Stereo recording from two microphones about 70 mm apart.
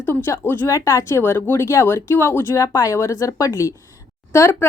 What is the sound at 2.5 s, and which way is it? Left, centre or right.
Speech, left.